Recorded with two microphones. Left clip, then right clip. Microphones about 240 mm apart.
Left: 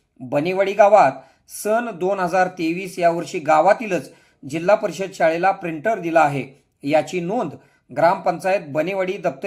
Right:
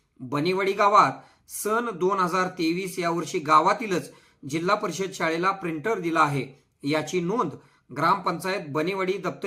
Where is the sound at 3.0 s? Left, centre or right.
Centre.